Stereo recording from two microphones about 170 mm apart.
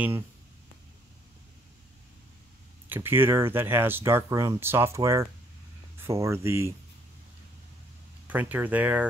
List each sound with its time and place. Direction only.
2.9 s speech: 15° right (ahead or behind)
8.3 s speech: 10° right (ahead or behind)